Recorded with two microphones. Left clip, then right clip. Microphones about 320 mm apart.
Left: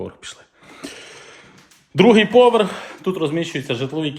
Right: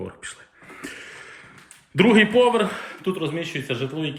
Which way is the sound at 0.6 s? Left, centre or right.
Centre.